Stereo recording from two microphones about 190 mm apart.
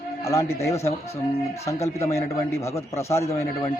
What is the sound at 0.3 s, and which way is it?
A man's voice, 15° left (ahead or behind).